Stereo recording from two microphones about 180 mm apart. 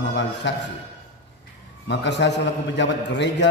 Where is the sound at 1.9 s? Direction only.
75° left (ahead or behind).